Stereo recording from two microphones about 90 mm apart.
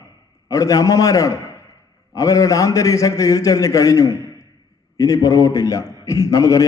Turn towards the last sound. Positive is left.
turn(degrees=40)  # may be behind; listen again after turning